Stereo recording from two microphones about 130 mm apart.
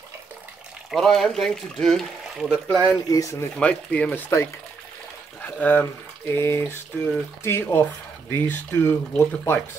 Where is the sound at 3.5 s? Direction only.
10° left (ahead or behind).